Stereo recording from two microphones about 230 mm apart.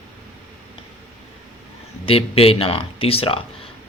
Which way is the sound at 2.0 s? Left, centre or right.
Left.